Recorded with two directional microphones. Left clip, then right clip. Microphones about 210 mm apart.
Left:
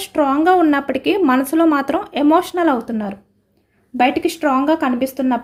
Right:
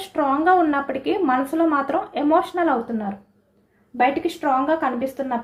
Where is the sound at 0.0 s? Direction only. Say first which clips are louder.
Left 4 dB; 60° left (ahead or behind).